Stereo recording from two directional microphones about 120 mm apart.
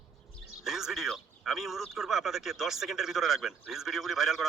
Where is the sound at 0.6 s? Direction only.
5° right (ahead or behind).